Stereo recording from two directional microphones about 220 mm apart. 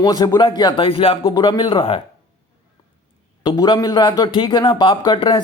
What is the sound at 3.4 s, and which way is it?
Speech, 20° left (ahead or behind).